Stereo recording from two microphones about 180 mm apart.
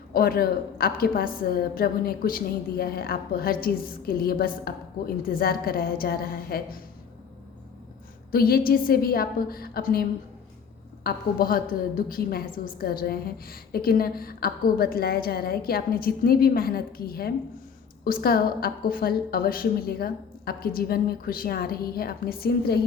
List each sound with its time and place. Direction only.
0.1 s a woman's voice: 55° left (ahead or behind)
8.3 s a woman's voice: 55° left (ahead or behind)